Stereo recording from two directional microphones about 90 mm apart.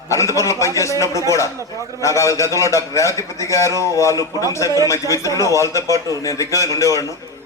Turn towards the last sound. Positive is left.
turn(degrees=35)  # may be behind; listen again after turning